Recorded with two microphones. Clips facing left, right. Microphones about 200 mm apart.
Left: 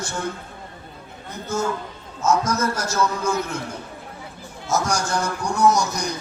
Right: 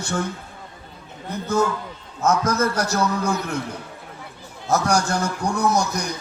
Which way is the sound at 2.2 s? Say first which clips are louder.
Right 1 dB; 55° right (ahead or behind).